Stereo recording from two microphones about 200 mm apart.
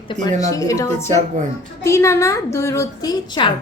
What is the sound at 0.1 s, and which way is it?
A woman's voice, 20° left (ahead or behind).